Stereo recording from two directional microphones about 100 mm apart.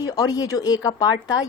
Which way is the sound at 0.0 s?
40° left (ahead or behind).